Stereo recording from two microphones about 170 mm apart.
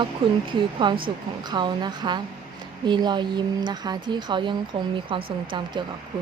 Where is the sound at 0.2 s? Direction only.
30° right (ahead or behind).